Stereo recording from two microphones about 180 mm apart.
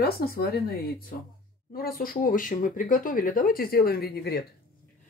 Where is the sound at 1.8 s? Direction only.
55° left (ahead or behind).